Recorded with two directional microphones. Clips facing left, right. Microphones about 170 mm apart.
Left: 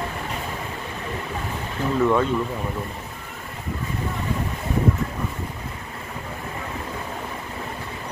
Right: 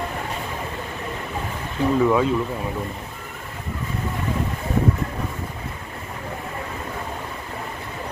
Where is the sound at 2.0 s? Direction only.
5° right (ahead or behind).